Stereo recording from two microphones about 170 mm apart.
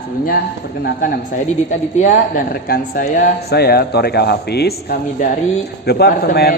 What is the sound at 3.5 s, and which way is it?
A man's voice, 65° left (ahead or behind).